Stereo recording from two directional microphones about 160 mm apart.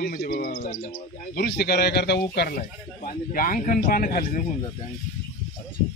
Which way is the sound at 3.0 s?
60° left (ahead or behind).